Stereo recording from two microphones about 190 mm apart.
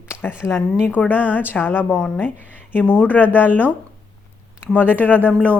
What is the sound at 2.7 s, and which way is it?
Speech, 10° left (ahead or behind).